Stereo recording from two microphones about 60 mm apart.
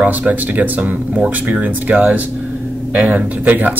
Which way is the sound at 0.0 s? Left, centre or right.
Right.